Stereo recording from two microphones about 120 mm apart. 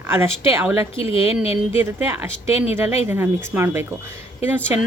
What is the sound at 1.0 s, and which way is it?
Speech, 50° left (ahead or behind).